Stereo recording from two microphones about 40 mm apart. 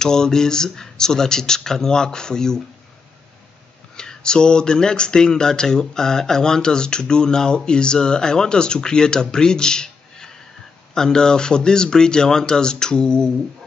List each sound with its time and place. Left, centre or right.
0.0 s speech: centre
3.9 s speech: centre